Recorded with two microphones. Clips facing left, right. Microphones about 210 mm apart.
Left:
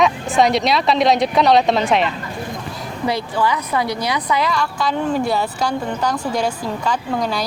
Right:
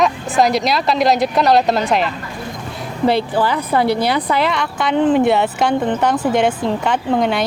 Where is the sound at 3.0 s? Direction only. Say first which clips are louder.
Right 4 dB; 30° right (ahead or behind).